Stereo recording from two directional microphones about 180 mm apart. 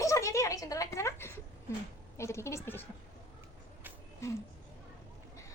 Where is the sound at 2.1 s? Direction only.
15° left (ahead or behind).